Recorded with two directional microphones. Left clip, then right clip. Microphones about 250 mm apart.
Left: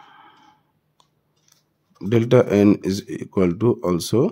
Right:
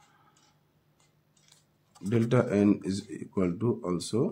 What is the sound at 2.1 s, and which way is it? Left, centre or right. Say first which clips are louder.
Speech: left 11 dB; left.